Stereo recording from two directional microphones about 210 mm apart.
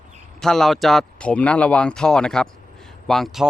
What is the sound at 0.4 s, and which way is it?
Speech, centre (ahead or behind).